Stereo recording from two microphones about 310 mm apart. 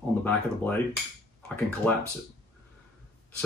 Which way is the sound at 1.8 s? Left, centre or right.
Centre.